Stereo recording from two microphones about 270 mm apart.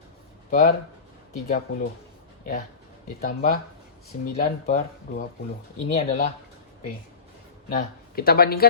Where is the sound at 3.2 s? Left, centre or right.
Left.